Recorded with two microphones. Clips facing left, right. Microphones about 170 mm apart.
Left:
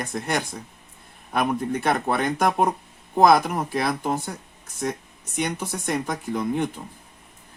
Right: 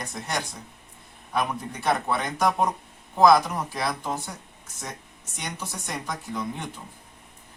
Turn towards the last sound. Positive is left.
turn(degrees=55)  # may be behind; listen again after turning